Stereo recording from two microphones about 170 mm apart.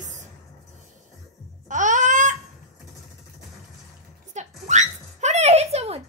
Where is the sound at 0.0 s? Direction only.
45° right (ahead or behind).